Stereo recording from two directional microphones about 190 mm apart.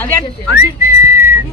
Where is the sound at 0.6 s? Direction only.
15° right (ahead or behind).